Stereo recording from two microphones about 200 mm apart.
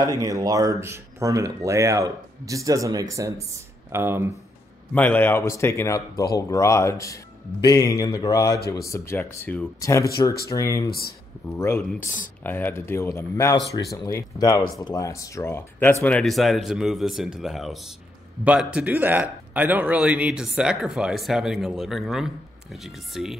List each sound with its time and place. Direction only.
0.0 s speech: 20° right (ahead or behind)
4.9 s speech: 10° left (ahead or behind)
10.9 s speech: 50° left (ahead or behind)
11.4 s speech: 10° left (ahead or behind)